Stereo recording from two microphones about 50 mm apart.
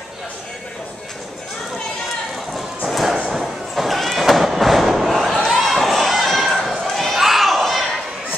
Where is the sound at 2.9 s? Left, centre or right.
Centre.